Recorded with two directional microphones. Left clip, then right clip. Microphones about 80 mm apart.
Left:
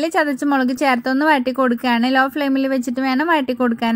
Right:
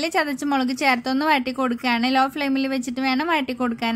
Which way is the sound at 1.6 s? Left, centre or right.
Left.